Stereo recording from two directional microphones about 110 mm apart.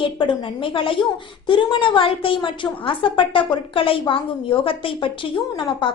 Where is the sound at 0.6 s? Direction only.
50° left (ahead or behind).